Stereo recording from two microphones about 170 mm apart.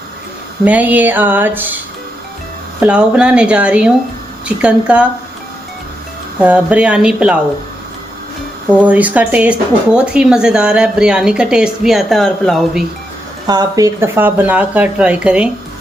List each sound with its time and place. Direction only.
0.6 s speech: 10° right (ahead or behind)
2.8 s speech: 5° right (ahead or behind)
6.4 s speech: 5° right (ahead or behind)
8.7 s speech: 10° right (ahead or behind)
13.5 s speech: 20° right (ahead or behind)